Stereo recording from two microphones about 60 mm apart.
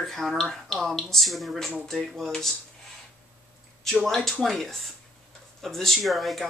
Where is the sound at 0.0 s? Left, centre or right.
Centre.